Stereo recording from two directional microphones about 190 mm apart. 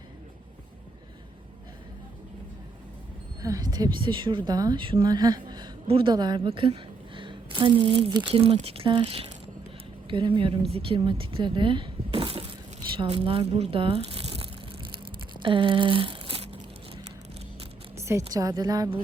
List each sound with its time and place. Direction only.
3.4 s a woman's voice: 20° right (ahead or behind)
17.9 s a woman's voice: 15° right (ahead or behind)